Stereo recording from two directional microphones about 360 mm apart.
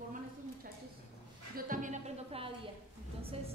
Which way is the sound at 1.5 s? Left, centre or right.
Right.